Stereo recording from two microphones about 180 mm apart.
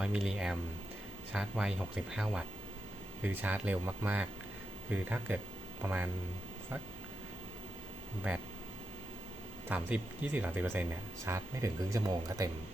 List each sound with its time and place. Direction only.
0.0 s speech: 5° right (ahead or behind)
8.3 s speech: 5° right (ahead or behind)
9.6 s speech: 10° right (ahead or behind)